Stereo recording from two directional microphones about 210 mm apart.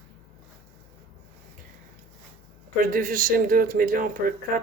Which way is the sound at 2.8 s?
40° right (ahead or behind).